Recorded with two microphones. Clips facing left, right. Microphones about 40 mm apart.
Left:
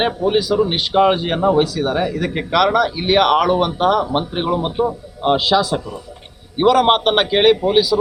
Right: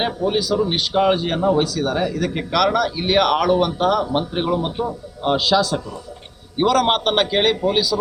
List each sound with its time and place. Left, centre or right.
0.0 s speech: centre